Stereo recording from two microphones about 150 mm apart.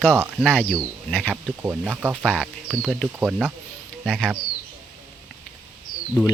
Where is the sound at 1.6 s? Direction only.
15° right (ahead or behind).